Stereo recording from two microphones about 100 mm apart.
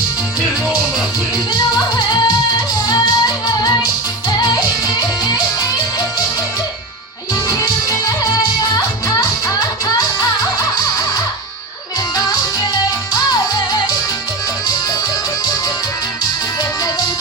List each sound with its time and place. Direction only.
2.0 s music: 40° left (ahead or behind)
7.4 s music: 35° left (ahead or behind)
12.1 s music: 40° left (ahead or behind)